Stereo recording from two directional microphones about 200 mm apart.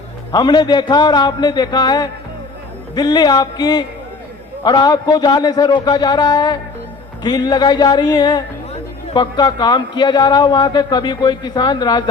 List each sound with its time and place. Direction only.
0.3 s a man's voice: 20° left (ahead or behind)